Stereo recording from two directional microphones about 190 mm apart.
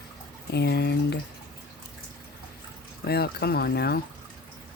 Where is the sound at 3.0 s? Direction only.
55° left (ahead or behind).